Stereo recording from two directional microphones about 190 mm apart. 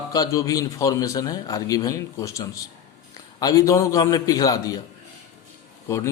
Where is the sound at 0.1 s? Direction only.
15° left (ahead or behind).